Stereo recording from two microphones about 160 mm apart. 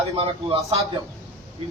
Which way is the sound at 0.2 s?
35° right (ahead or behind).